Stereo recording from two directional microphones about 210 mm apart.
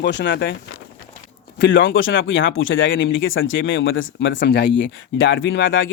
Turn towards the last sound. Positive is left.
turn(degrees=65)  # may be behind; listen again after turning